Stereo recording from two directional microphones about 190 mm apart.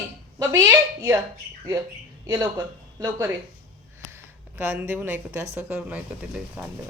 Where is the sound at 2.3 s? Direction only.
20° right (ahead or behind).